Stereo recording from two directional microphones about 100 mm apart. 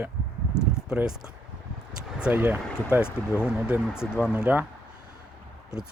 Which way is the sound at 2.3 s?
15° right (ahead or behind).